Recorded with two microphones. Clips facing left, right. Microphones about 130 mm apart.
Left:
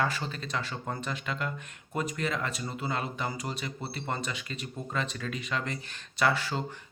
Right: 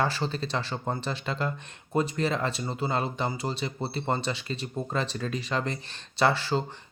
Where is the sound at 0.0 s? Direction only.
30° right (ahead or behind).